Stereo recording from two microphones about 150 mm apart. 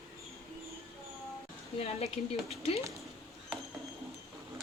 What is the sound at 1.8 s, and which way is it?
Speech, 45° left (ahead or behind).